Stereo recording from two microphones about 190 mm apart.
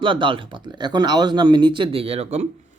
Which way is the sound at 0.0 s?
25° right (ahead or behind).